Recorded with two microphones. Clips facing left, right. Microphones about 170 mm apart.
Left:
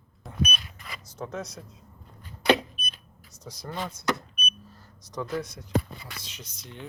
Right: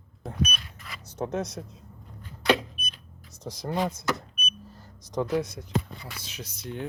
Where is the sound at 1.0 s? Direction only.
65° right (ahead or behind).